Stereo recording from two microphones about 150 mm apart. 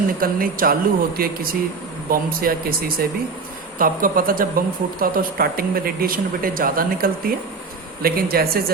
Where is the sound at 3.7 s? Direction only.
70° right (ahead or behind).